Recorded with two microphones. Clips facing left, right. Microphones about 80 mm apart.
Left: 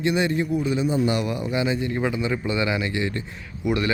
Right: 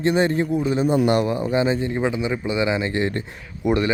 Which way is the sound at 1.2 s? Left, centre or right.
Right.